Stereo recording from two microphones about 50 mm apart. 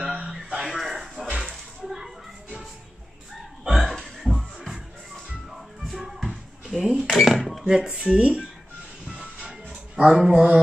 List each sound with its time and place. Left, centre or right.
0.0 s music: right
0.5 s a sound: centre
3.6 s burping: centre
4.2 s music: centre
7.2 s speech: centre
7.6 s speech: centre
9.0 s music: centre
9.9 s speech: centre